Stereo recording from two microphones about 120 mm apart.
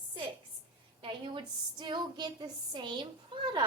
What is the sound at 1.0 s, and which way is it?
A woman's voice, 40° right (ahead or behind).